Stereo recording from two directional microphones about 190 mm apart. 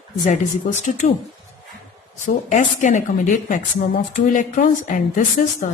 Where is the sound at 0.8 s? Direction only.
40° left (ahead or behind).